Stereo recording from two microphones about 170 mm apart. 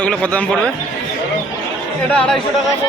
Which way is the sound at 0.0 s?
5° left (ahead or behind).